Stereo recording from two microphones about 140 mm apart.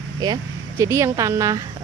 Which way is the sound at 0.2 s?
25° right (ahead or behind).